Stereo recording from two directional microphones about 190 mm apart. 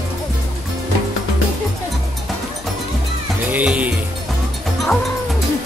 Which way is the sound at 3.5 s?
5° right (ahead or behind).